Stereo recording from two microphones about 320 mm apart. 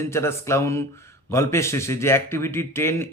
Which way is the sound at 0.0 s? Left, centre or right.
Centre.